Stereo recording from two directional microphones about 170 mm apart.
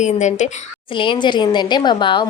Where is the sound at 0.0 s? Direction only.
45° left (ahead or behind).